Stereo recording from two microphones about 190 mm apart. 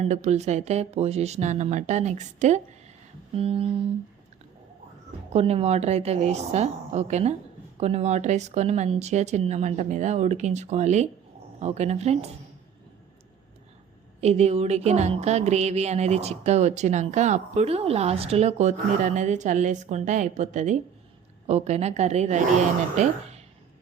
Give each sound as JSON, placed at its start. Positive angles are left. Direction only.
{"t": 0.0, "sound": "speech", "side_deg": -35}
{"t": 5.3, "sound": "speech", "side_deg": -35}
{"t": 14.2, "sound": "speech", "side_deg": -35}